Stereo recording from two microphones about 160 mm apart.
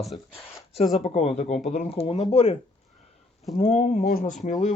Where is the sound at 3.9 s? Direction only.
65° left (ahead or behind).